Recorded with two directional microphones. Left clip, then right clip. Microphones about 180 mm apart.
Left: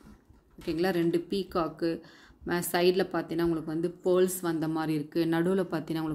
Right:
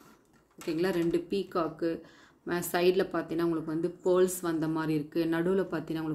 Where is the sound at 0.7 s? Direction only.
15° left (ahead or behind).